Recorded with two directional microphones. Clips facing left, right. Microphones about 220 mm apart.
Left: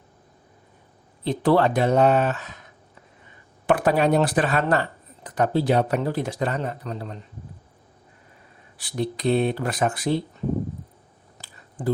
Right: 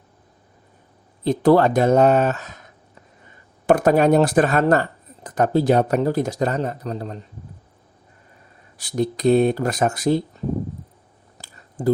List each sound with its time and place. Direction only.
1.2 s speech: 45° right (ahead or behind)
3.7 s speech: 45° right (ahead or behind)
8.8 s speech: 45° right (ahead or behind)
11.3 s a sound: 40° right (ahead or behind)